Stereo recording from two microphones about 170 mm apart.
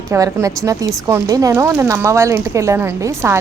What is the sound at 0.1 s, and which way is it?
A woman's voice, 20° right (ahead or behind).